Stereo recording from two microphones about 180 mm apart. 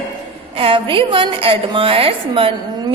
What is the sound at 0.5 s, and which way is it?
A woman's voice, 30° right (ahead or behind).